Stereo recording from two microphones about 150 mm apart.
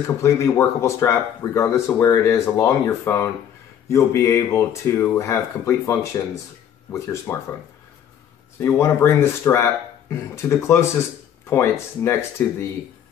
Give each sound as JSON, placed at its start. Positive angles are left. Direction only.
{"t": 0.0, "sound": "speech", "side_deg": 20}
{"t": 8.5, "sound": "speech", "side_deg": 20}